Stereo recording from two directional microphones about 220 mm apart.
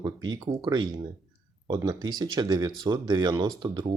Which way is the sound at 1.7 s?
20° right (ahead or behind).